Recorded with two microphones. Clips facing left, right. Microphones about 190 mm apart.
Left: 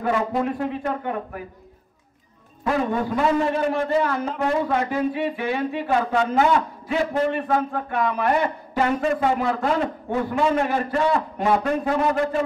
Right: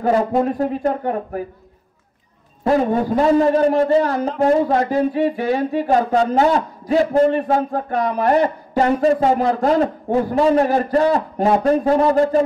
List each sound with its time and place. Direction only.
0.0 s a man's voice: 40° right (ahead or behind)
2.6 s a man's voice: 35° right (ahead or behind)